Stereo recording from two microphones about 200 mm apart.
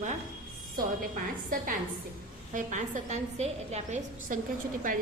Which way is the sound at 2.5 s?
40° right (ahead or behind).